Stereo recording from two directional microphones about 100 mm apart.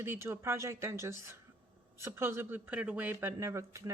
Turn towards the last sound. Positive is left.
turn(degrees=-30)  # may be behind; listen again after turning